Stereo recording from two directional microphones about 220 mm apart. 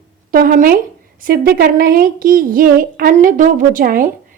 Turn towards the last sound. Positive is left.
turn(degrees=-40)  # may be behind; listen again after turning